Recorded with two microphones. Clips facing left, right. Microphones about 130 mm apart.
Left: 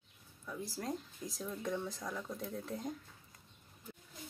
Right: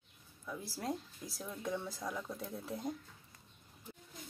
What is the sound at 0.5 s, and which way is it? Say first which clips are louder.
Speech: even; centre (ahead or behind).